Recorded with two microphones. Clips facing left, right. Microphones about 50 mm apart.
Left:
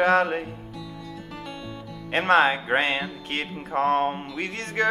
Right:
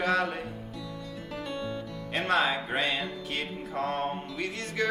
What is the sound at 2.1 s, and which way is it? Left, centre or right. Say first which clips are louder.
Music: left 7 dB; left.